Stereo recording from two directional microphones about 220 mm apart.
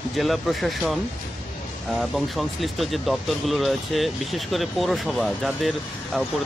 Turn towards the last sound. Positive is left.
turn(degrees=0)  # may be behind; listen again after turning